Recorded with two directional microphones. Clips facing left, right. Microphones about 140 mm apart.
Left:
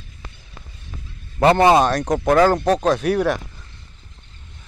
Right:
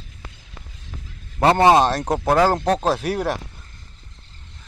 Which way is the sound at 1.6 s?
30° right (ahead or behind).